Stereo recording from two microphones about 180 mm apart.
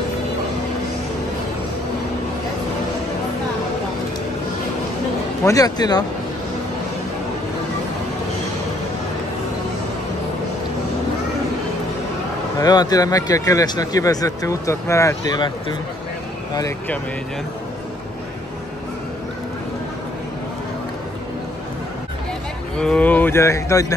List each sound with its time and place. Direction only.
5.4 s speech: 20° left (ahead or behind)
12.5 s speech: 20° left (ahead or behind)
22.8 s speech: 5° left (ahead or behind)